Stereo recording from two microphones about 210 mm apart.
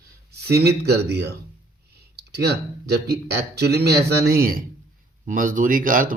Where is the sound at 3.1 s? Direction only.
50° right (ahead or behind).